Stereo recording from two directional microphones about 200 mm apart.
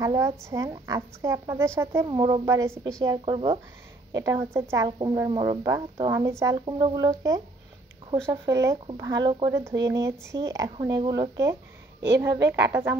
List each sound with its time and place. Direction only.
0.0 s a woman's voice: 15° right (ahead or behind)
12.3 s a woman's voice: 60° right (ahead or behind)